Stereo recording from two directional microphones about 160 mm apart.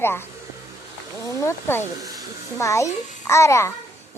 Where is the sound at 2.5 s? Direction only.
20° left (ahead or behind).